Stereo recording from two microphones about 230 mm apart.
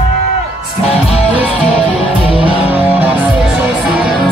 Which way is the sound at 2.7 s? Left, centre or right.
Centre.